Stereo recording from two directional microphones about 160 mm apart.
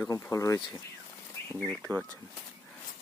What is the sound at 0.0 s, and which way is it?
Speech, 15° left (ahead or behind).